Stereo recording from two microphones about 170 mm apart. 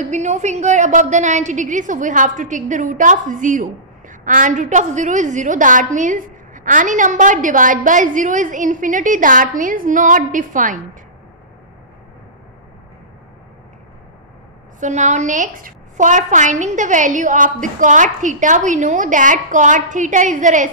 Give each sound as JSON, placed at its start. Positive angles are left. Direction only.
{"t": 0.1, "sound": "a woman's voice", "side_deg": -45}
{"t": 14.8, "sound": "a woman's voice", "side_deg": -45}